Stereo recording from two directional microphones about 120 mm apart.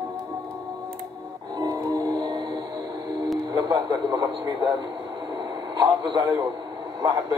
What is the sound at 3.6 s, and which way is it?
Radio, 35° right (ahead or behind).